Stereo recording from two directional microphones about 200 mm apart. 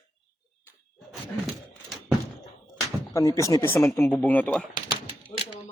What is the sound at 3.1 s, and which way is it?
Speech, 15° left (ahead or behind).